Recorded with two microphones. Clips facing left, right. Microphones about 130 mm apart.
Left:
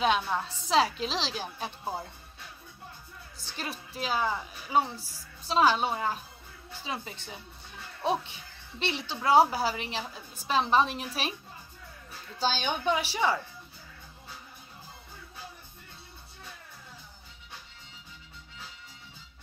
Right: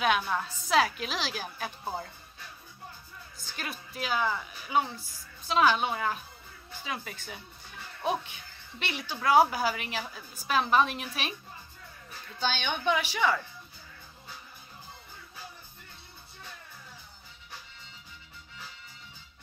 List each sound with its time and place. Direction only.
0.3 s a woman's voice: 25° left (ahead or behind)
3.3 s a woman's voice: 30° left (ahead or behind)
12.4 s a woman's voice: 35° left (ahead or behind)